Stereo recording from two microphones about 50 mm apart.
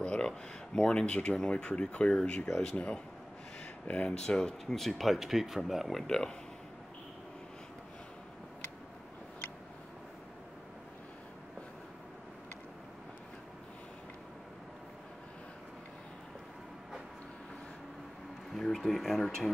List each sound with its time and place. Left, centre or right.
0.0 s speech: centre
4.2 s speech: centre
6.0 s speech: centre
18.5 s speech: centre